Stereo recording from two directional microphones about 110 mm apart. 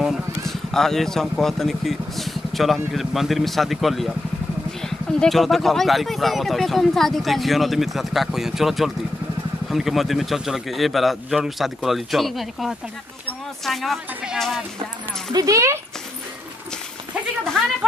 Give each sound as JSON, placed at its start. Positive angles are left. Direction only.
{"t": 0.5, "sound": "speech", "side_deg": 5}
{"t": 15.3, "sound": "speech", "side_deg": -30}